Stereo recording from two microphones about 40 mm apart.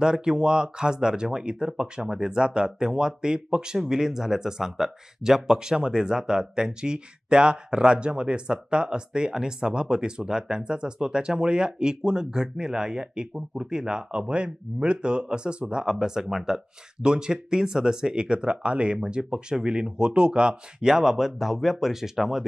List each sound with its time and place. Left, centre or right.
0.0 s speech: centre